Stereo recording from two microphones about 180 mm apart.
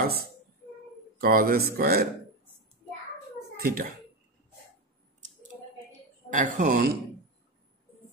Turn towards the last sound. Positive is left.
turn(degrees=-50)  # may be behind; listen again after turning